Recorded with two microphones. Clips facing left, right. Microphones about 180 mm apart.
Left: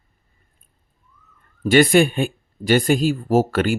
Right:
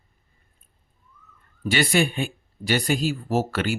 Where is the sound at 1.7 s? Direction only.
50° left (ahead or behind).